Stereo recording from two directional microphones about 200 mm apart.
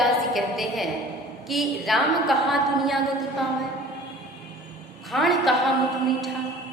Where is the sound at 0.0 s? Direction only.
Centre (ahead or behind).